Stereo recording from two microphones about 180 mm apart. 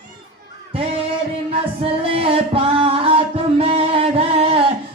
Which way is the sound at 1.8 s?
30° right (ahead or behind).